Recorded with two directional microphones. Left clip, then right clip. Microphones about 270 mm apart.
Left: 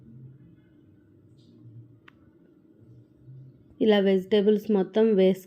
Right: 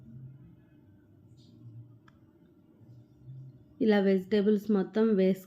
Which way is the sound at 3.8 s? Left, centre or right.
Centre.